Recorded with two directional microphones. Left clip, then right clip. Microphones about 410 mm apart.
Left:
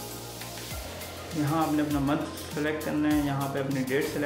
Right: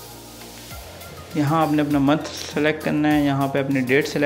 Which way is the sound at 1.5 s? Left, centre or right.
Right.